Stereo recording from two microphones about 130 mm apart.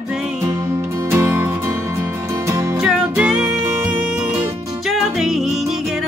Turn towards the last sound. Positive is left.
turn(degrees=-5)  # may be behind; listen again after turning